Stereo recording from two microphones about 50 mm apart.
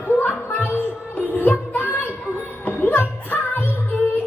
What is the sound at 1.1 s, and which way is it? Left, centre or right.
Music, left.